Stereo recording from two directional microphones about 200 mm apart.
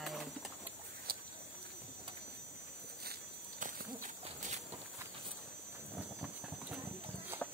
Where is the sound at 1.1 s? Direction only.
50° right (ahead or behind).